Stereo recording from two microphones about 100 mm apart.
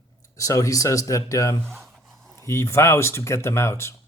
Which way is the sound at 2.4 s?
25° left (ahead or behind).